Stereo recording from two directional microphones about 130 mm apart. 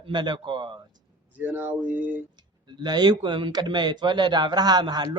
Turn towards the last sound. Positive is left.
turn(degrees=-30)  # may be behind; listen again after turning